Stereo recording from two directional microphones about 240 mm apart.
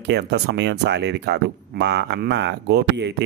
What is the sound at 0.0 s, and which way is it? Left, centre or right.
Speech, right.